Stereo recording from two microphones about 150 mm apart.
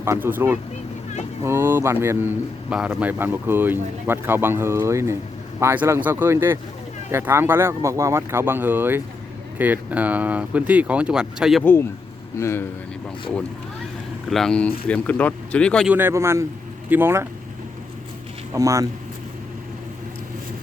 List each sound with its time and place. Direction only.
0.0 s speech: 15° right (ahead or behind)
11.6 s speech: 15° left (ahead or behind)
14.3 s speech: 5° left (ahead or behind)
15.9 s speech: 15° right (ahead or behind)
18.5 s speech: 20° right (ahead or behind)